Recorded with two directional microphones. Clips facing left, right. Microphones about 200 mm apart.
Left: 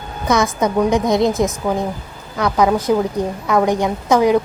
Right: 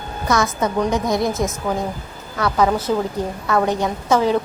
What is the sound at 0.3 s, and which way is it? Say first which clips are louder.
A woman's voice: left 3 dB; 20° left (ahead or behind).